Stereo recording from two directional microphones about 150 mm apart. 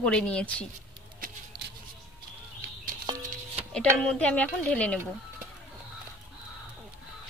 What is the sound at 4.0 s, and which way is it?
A woman's voice, 5° left (ahead or behind).